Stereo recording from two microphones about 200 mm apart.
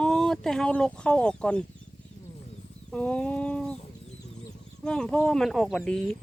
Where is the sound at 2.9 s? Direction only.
5° left (ahead or behind).